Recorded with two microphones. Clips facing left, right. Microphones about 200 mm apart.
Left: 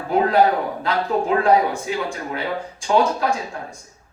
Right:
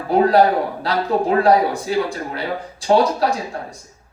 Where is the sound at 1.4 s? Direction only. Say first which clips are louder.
Right 2 dB; 35° right (ahead or behind).